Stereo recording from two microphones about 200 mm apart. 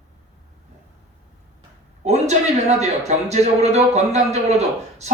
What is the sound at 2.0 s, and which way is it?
A man's voice, 35° right (ahead or behind).